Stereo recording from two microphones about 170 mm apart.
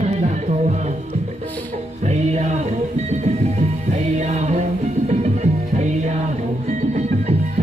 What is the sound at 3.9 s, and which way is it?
Music, 40° right (ahead or behind).